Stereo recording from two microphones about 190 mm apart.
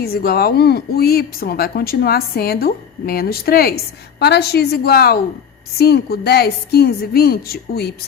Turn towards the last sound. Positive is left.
turn(degrees=55)  # may be behind; listen again after turning